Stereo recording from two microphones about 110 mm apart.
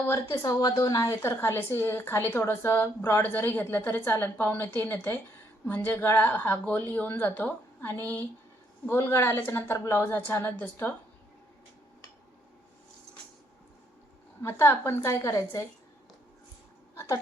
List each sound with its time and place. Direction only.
0.1 s a woman's voice: 30° left (ahead or behind)
14.4 s a woman's voice: 20° left (ahead or behind)